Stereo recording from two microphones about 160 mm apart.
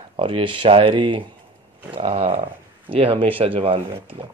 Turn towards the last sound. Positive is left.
turn(degrees=-35)  # may be behind; listen again after turning